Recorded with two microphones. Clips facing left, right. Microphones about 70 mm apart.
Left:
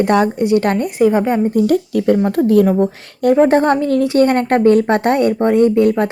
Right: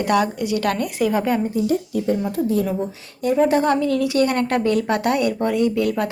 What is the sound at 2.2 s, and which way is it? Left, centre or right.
A woman's voice, left.